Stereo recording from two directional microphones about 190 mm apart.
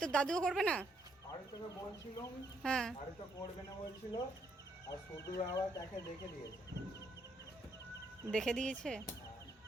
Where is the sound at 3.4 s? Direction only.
20° left (ahead or behind).